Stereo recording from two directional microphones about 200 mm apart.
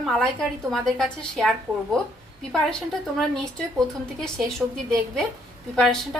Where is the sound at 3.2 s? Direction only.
Centre (ahead or behind).